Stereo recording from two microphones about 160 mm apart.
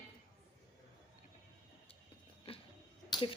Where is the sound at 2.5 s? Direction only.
35° left (ahead or behind).